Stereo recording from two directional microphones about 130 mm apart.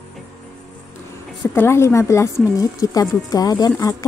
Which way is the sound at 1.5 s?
20° left (ahead or behind).